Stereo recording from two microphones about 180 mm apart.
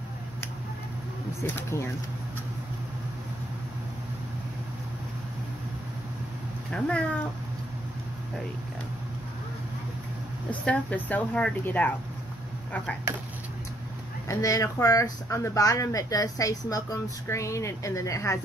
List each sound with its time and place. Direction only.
1.4 s a woman's voice: 15° left (ahead or behind)
6.7 s speech: 5° left (ahead or behind)
10.5 s a woman's voice: 5° left (ahead or behind)
14.2 s speech: 20° left (ahead or behind)